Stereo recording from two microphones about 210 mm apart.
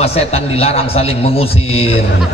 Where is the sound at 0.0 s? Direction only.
30° left (ahead or behind).